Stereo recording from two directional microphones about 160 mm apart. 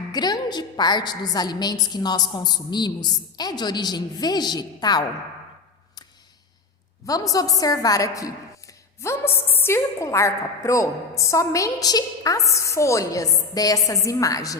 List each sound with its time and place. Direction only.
0.1 s a woman's voice: 25° left (ahead or behind)
7.0 s a woman's voice: 20° left (ahead or behind)